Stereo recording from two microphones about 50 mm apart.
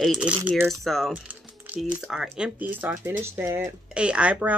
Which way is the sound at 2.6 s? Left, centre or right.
Right.